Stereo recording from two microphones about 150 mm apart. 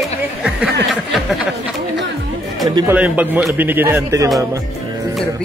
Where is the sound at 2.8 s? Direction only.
10° right (ahead or behind).